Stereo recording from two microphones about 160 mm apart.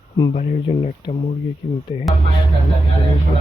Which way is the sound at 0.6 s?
35° left (ahead or behind).